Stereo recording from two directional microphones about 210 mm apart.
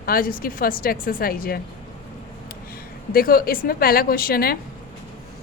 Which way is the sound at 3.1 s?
45° left (ahead or behind).